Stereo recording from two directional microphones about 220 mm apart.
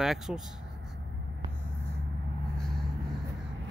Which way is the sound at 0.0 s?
Centre (ahead or behind).